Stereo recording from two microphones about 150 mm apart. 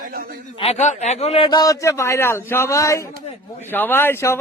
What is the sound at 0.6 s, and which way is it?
A man's voice, 45° left (ahead or behind).